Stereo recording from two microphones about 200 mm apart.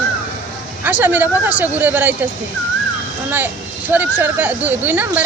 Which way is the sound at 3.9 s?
10° right (ahead or behind).